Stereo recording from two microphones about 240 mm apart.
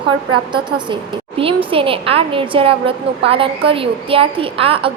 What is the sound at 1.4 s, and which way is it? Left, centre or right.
A woman's voice, right.